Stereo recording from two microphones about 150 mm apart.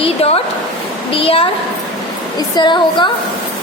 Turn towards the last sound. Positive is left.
turn(degrees=30)  # may be behind; listen again after turning